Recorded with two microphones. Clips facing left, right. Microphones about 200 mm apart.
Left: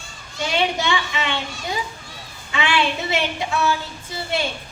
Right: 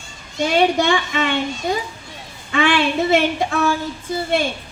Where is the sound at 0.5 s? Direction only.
50° right (ahead or behind).